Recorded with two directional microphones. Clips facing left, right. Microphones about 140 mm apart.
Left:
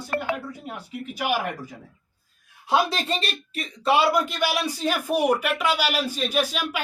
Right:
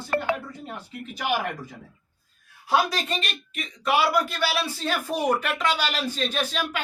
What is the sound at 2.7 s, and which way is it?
A man's voice, 25° left (ahead or behind).